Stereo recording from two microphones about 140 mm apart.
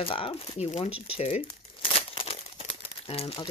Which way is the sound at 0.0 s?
40° left (ahead or behind).